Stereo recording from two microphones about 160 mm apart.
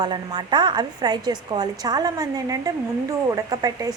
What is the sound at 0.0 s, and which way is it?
A woman's voice, 30° right (ahead or behind).